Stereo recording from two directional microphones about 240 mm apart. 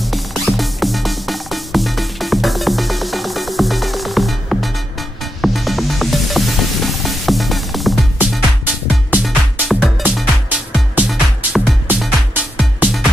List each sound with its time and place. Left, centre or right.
0.0 s music: centre